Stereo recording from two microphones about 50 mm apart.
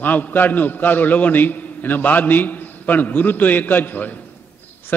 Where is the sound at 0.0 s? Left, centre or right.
Left.